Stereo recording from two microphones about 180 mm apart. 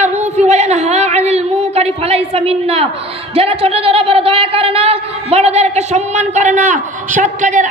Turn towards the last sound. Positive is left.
turn(degrees=-45)  # may be behind; listen again after turning